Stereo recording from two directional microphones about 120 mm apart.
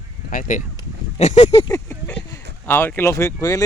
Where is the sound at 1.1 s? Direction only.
70° left (ahead or behind).